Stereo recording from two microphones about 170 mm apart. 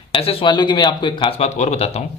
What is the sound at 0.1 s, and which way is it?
Speech, 35° left (ahead or behind).